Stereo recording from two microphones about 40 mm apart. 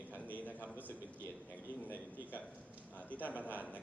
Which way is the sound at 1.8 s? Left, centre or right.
Left.